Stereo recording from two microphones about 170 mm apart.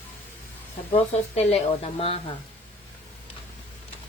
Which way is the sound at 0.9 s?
35° left (ahead or behind).